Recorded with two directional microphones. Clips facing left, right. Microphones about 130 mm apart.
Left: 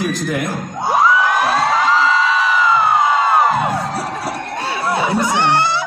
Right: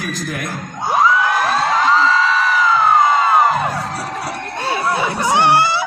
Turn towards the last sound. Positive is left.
turn(degrees=-10)  # may be behind; listen again after turning